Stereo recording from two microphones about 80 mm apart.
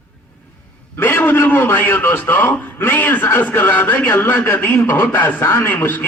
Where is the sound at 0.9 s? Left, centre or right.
Left.